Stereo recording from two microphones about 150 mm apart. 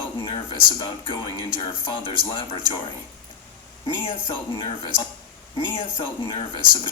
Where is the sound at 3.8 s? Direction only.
35° left (ahead or behind).